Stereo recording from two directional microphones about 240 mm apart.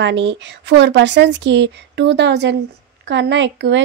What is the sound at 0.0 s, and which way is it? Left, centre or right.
Speech, right.